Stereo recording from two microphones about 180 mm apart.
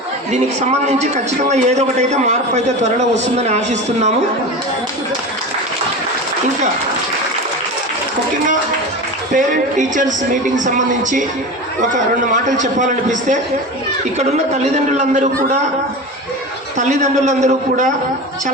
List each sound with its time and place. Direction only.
0.3 s a man's voice: 40° right (ahead or behind)
9.3 s a man's voice: 45° right (ahead or behind)
16.7 s a man's voice: 40° right (ahead or behind)